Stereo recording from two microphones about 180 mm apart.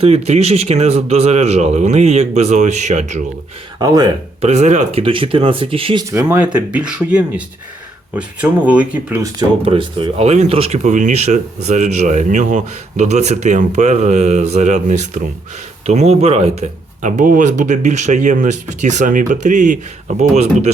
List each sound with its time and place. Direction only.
0.0 s speech: 35° right (ahead or behind)
3.8 s speech: 20° right (ahead or behind)
4.4 s speech: 40° right (ahead or behind)
6.1 s speech: 15° right (ahead or behind)
9.2 s speech: 25° right (ahead or behind)